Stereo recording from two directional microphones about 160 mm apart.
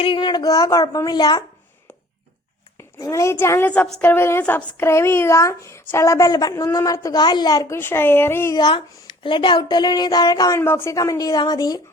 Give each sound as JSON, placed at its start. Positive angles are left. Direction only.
{"t": 0.0, "sound": "speech", "side_deg": 30}
{"t": 2.7, "sound": "a woman's voice", "side_deg": 20}
{"t": 8.5, "sound": "speech", "side_deg": 30}